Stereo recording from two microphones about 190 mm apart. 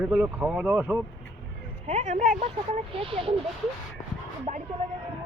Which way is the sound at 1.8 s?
35° right (ahead or behind).